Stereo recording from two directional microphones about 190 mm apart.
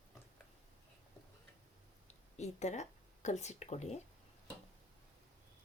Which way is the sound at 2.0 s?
35° left (ahead or behind).